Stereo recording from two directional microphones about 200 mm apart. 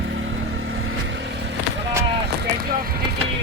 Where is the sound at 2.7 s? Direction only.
50° right (ahead or behind).